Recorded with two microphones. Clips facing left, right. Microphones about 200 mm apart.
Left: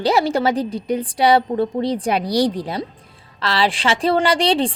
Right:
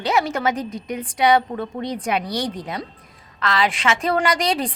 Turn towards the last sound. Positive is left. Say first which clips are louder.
# left 4 dB
turn(degrees=30)  # may be behind; listen again after turning